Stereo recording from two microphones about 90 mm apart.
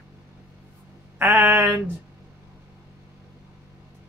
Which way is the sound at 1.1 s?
20° right (ahead or behind).